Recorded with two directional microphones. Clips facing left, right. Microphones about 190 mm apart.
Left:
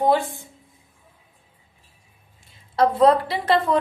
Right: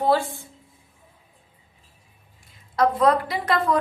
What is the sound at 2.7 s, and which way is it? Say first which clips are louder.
A woman's voice: left 3 dB; 30° left (ahead or behind).